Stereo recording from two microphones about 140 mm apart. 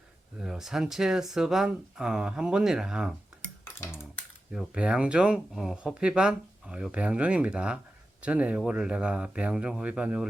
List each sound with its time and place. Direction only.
0.3 s speech: 5° right (ahead or behind)
3.4 s cutlery: 15° left (ahead or behind)
4.5 s speech: 5° right (ahead or behind)